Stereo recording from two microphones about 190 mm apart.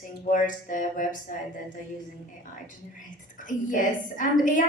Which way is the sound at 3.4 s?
45° left (ahead or behind).